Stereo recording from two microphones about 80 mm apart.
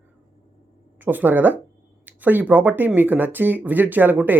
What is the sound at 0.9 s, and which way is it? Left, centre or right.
Speech, right.